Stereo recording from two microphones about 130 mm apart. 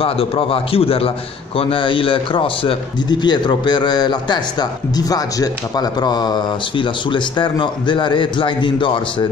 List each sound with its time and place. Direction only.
0.0 s a man's voice: 45° left (ahead or behind)